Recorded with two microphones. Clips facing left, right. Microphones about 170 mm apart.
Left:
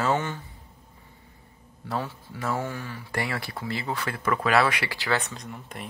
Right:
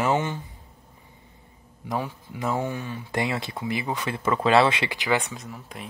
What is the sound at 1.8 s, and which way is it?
Speech, 15° right (ahead or behind).